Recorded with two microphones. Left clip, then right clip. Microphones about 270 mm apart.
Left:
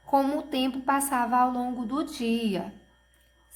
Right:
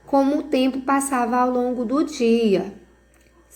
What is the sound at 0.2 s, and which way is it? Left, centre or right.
A woman's voice, centre.